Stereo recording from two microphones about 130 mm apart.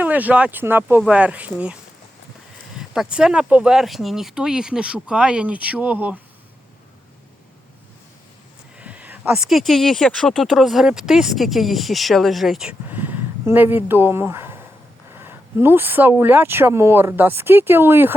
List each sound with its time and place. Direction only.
0.0 s speech: 10° right (ahead or behind)
2.7 s speech: 5° right (ahead or behind)
8.8 s speech: 10° right (ahead or behind)